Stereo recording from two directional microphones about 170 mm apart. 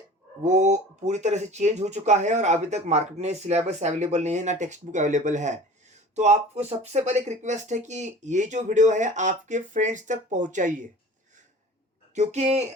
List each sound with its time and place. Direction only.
0.4 s speech: 45° right (ahead or behind)
12.1 s speech: 40° right (ahead or behind)